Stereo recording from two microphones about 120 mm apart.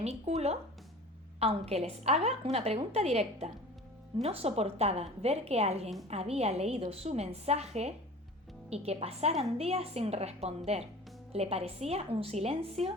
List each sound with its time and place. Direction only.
0.0 s a woman's voice: 65° right (ahead or behind)